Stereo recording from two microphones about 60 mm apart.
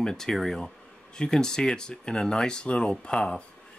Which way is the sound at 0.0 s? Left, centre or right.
Centre.